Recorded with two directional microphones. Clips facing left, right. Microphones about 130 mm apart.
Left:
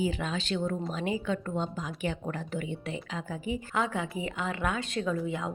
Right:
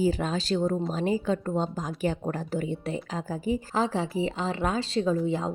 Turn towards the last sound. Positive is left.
turn(degrees=-30)  # may be behind; listen again after turning